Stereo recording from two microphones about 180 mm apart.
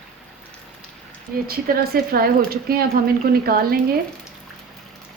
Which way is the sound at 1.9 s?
55° right (ahead or behind).